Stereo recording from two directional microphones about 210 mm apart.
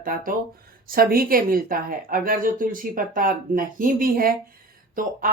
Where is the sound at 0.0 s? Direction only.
40° right (ahead or behind).